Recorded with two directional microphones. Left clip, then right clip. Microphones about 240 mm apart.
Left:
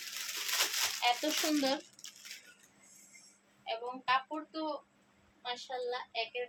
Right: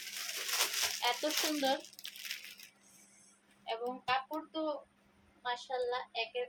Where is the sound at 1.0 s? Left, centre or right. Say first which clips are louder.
Left 3 dB; left.